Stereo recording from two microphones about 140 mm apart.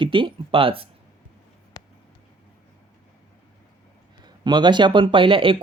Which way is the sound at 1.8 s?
30° left (ahead or behind).